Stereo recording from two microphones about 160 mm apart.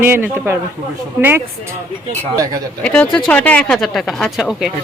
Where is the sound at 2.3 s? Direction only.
20° right (ahead or behind).